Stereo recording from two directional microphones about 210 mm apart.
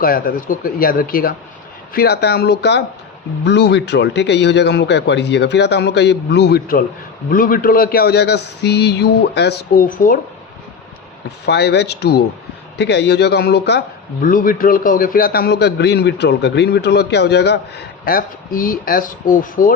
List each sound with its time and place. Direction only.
0.0 s a man's voice: 40° left (ahead or behind)
11.4 s a man's voice: 55° left (ahead or behind)